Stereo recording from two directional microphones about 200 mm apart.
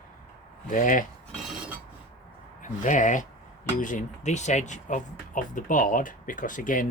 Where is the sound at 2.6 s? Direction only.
35° left (ahead or behind).